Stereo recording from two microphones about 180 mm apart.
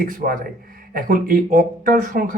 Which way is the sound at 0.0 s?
55° right (ahead or behind).